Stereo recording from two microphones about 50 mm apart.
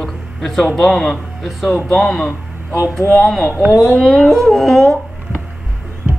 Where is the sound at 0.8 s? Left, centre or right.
Centre.